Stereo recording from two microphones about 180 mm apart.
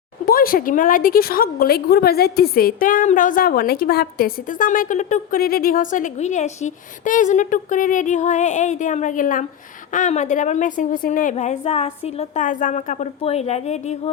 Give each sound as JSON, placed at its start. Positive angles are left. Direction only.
{"t": 0.3, "sound": "a woman's voice", "side_deg": 55}